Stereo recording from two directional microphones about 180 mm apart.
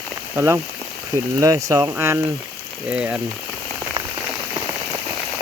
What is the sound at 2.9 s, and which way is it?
Speech, 5° right (ahead or behind).